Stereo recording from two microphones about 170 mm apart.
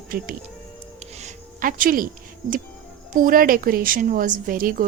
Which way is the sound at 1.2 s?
50° right (ahead or behind).